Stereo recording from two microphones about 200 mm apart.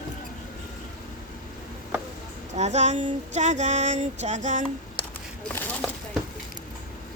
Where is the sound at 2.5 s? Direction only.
35° right (ahead or behind).